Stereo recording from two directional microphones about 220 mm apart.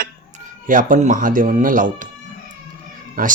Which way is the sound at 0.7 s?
35° right (ahead or behind).